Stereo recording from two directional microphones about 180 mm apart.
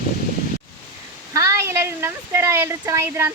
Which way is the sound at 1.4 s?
15° right (ahead or behind).